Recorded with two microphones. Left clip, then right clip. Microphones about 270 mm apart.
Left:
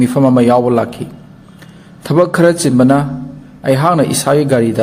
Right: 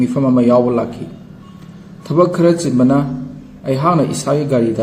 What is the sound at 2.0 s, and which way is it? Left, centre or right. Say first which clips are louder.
A man's voice: left 2 dB; left.